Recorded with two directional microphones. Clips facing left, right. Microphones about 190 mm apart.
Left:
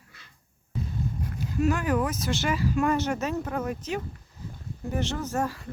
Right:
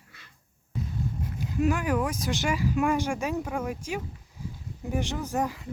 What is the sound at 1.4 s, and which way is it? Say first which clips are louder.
Speech: even; 15° right (ahead or behind).